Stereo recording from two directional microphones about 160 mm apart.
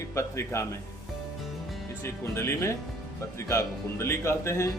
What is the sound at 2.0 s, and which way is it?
Speech, 15° left (ahead or behind).